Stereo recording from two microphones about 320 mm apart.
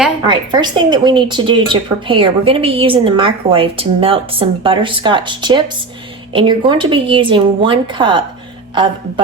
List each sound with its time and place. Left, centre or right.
0.3 s a woman's voice: centre